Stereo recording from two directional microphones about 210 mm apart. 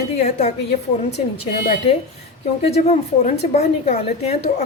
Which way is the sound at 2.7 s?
30° left (ahead or behind).